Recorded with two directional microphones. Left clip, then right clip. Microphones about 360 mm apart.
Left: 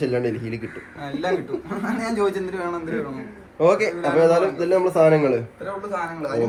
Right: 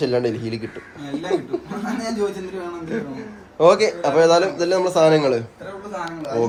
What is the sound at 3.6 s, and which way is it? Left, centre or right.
A man's voice, centre.